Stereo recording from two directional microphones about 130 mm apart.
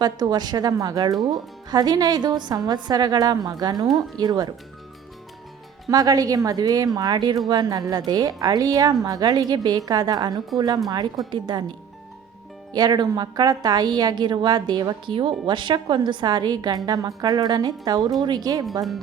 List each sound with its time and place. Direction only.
0.0 s a woman's voice: 35° right (ahead or behind)
5.9 s a woman's voice: 30° right (ahead or behind)
12.7 s a woman's voice: 30° right (ahead or behind)